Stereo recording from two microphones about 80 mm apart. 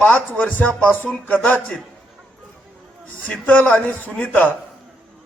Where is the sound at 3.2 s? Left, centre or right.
Centre.